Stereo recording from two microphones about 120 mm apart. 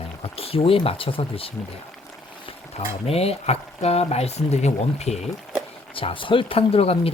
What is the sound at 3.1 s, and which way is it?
Speech, 55° left (ahead or behind).